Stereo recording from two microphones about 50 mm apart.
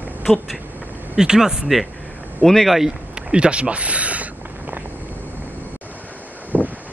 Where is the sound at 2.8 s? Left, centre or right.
Centre; by 4.8 s right.